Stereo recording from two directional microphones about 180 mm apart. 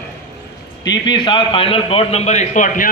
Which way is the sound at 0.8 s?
25° left (ahead or behind).